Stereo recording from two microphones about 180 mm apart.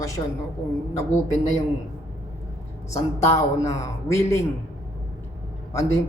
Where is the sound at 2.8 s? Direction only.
15° left (ahead or behind).